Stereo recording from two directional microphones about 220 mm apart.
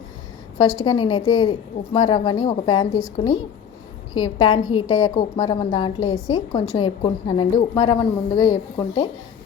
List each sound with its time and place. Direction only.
0.6 s a woman's voice: 20° left (ahead or behind)